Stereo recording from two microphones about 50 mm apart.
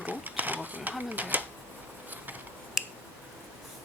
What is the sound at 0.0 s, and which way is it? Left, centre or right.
Sewing machine, right.